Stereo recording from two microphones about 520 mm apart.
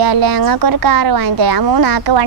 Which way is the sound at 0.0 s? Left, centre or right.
Right.